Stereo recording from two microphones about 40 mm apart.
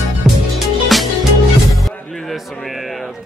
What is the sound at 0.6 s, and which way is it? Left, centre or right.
Music, centre.